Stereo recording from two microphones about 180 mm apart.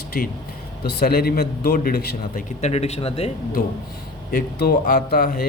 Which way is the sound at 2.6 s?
35° left (ahead or behind).